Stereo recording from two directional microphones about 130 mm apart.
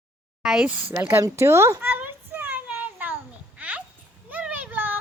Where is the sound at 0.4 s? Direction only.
10° right (ahead or behind).